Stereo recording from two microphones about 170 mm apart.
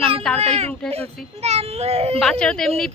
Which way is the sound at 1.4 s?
40° right (ahead or behind).